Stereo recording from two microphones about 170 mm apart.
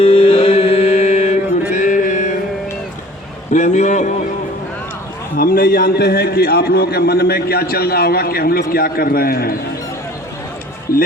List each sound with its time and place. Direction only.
0.0 s music: 35° left (ahead or behind)
1.7 s a sound: 50° left (ahead or behind)
3.5 s a man's voice: 45° left (ahead or behind)
5.4 s a man's voice: 60° left (ahead or behind)